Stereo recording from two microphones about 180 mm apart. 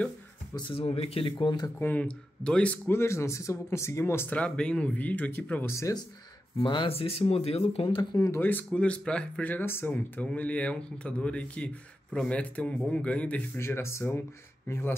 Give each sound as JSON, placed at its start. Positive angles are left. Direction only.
{"t": 0.6, "sound": "speech", "side_deg": 30}
{"t": 1.8, "sound": "speech", "side_deg": 10}